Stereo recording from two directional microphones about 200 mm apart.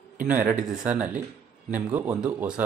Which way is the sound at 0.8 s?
5° right (ahead or behind).